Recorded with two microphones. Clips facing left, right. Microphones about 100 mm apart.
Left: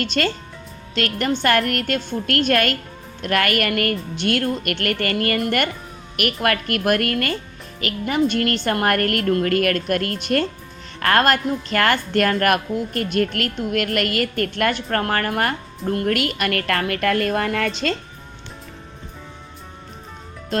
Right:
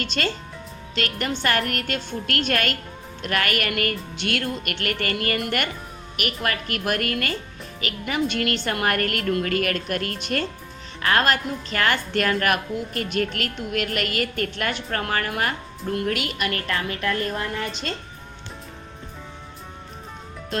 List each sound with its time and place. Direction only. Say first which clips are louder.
0.0 s a woman's voice: left 5 dB; 50° left (ahead or behind)
6.1 s a woman's voice: left 6 dB; 55° left (ahead or behind); by 17.9 s 90° left